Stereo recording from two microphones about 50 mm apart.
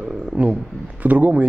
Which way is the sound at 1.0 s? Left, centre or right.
Right.